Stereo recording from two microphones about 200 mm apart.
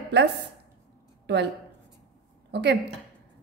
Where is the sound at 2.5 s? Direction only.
55° right (ahead or behind).